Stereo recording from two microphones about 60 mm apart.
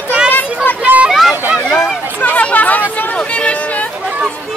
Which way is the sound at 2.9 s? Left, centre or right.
Left.